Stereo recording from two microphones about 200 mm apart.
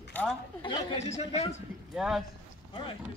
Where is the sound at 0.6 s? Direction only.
25° left (ahead or behind).